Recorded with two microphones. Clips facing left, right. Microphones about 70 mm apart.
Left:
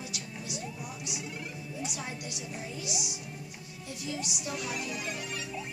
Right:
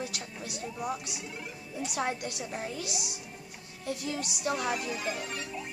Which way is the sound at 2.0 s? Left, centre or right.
Right.